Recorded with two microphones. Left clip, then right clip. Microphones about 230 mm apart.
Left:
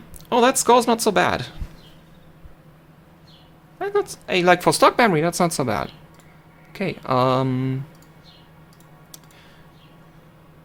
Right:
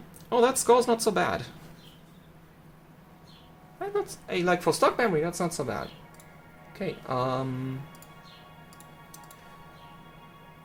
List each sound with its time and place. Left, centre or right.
0.3 s speech: left
3.8 s speech: left